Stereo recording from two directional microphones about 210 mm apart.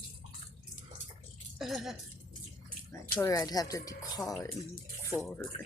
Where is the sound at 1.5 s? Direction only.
Centre (ahead or behind).